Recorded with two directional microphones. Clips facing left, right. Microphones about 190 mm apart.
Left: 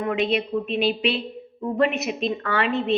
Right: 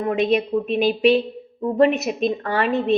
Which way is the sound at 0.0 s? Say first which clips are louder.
Right 4 dB; 40° right (ahead or behind).